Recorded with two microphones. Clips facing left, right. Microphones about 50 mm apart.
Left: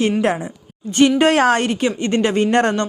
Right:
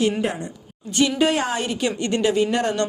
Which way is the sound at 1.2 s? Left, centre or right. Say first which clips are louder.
Left 6 dB; left.